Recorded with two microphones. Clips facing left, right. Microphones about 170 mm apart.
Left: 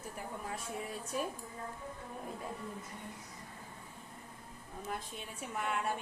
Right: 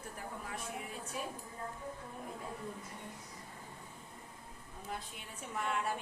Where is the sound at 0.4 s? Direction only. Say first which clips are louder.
Left 2 dB; 30° left (ahead or behind).